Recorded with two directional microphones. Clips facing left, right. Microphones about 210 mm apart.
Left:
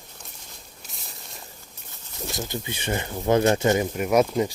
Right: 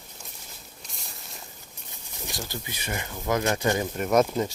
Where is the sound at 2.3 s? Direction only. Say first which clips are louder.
Left 5 dB; 20° left (ahead or behind).